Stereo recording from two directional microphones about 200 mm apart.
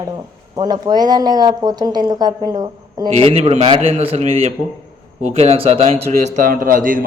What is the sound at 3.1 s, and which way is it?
A man's voice, 30° right (ahead or behind).